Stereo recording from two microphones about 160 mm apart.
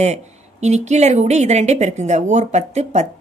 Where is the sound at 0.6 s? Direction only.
45° right (ahead or behind).